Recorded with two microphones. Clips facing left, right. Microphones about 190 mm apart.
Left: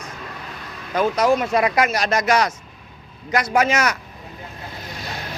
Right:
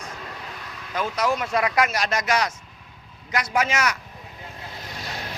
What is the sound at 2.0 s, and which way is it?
A man's voice, 45° left (ahead or behind).